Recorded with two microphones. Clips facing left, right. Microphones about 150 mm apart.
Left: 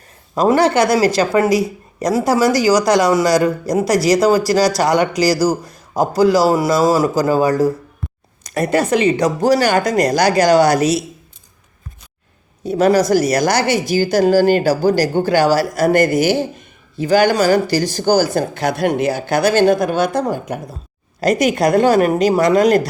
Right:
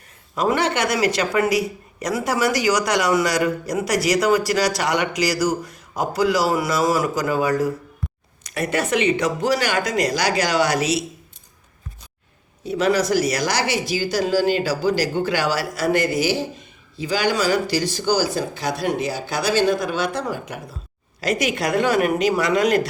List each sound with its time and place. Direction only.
0.3 s speech: 35° left (ahead or behind)
12.6 s speech: 40° left (ahead or behind)